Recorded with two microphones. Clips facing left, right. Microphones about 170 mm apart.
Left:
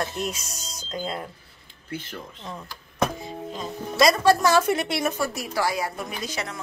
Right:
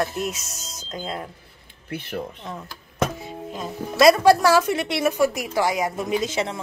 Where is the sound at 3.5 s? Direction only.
5° right (ahead or behind).